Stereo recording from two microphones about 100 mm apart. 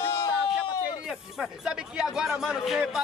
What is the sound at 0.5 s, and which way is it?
Speech, 5° right (ahead or behind).